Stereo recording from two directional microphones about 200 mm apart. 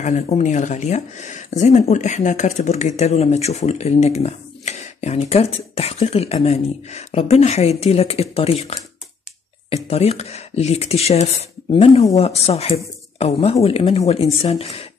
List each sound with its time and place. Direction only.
0.0 s speech: 35° left (ahead or behind)
9.8 s speech: 30° left (ahead or behind)